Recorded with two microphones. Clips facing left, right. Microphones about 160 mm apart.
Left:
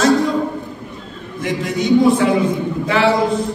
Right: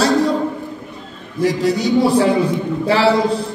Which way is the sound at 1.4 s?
35° right (ahead or behind).